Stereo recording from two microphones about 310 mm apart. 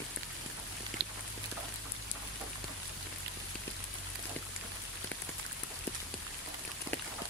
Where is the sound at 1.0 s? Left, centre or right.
Right.